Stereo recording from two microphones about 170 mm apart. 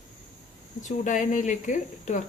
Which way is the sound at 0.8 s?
45° left (ahead or behind).